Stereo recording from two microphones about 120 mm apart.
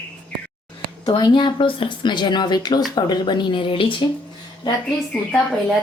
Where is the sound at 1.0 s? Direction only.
40° left (ahead or behind).